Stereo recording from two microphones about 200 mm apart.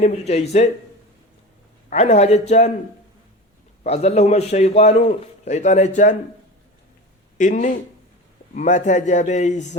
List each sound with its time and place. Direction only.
0.0 s a man's voice: 35° left (ahead or behind)
1.9 s a man's voice: 35° left (ahead or behind)
3.8 s a man's voice: 30° left (ahead or behind)
7.3 s a man's voice: 40° left (ahead or behind)